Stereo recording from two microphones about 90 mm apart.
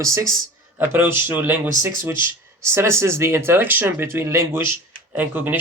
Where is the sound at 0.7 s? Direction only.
25° right (ahead or behind).